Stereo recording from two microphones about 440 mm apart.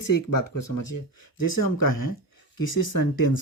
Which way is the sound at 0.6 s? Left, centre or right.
Left.